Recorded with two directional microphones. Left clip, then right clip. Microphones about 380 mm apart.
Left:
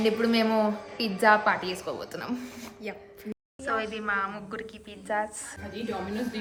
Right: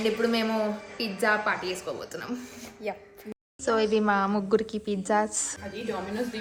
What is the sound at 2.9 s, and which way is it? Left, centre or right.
A woman's voice, centre.